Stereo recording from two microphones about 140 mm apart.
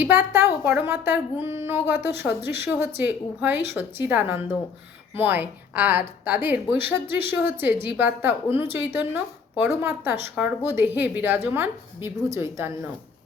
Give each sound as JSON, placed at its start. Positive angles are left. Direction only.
{"t": 0.3, "sound": "a woman's voice", "side_deg": -15}